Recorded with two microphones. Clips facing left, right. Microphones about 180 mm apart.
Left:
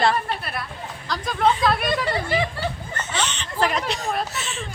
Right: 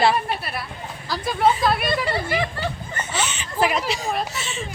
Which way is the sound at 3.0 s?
10° right (ahead or behind).